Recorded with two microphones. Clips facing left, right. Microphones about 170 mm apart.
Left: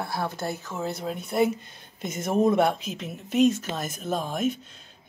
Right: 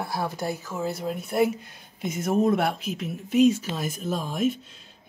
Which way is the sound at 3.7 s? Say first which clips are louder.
Right 1 dB; 50° left (ahead or behind).